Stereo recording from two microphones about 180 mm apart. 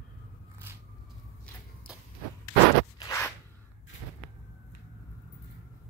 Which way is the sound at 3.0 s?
15° left (ahead or behind).